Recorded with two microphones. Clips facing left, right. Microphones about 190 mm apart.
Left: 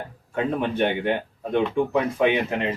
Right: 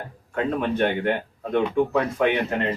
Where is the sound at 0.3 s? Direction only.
20° left (ahead or behind).